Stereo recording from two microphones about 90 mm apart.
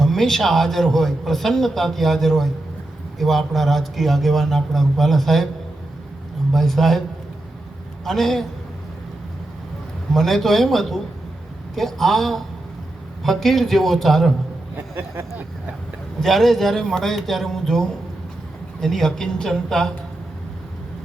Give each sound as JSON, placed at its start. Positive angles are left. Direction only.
{"t": 0.0, "sound": "a man's voice", "side_deg": 0}
{"t": 6.5, "sound": "a man's voice", "side_deg": 0}
{"t": 8.0, "sound": "a man's voice", "side_deg": 5}
{"t": 10.1, "sound": "a man's voice", "side_deg": 5}
{"t": 14.9, "sound": "speech", "side_deg": -30}
{"t": 16.2, "sound": "a man's voice", "side_deg": 0}